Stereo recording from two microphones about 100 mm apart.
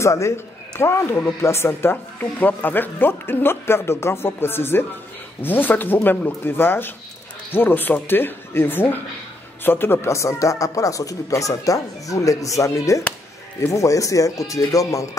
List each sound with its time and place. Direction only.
0.0 s speech: 30° left (ahead or behind)